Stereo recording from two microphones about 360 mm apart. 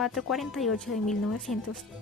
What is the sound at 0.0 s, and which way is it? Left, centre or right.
Speech, centre.